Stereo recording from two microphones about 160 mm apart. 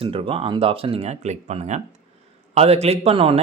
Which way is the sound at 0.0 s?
35° right (ahead or behind).